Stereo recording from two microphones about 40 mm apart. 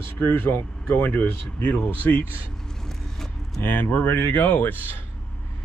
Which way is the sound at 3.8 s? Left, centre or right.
Left.